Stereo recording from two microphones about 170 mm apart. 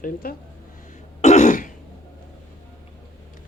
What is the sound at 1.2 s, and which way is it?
Throat clearing, 45° left (ahead or behind).